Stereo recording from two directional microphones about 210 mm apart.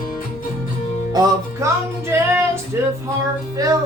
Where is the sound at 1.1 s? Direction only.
20° right (ahead or behind).